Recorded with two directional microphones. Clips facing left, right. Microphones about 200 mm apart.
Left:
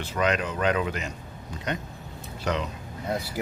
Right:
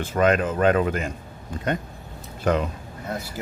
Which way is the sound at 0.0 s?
50° right (ahead or behind).